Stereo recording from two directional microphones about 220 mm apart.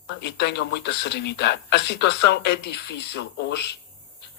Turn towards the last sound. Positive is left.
turn(degrees=50)  # may be behind; listen again after turning